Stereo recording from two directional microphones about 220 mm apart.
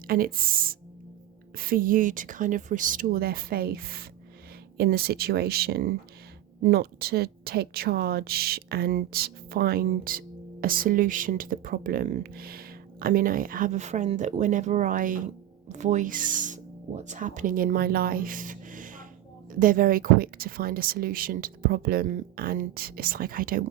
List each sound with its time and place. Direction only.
0.1 s a woman's voice: 40° right (ahead or behind)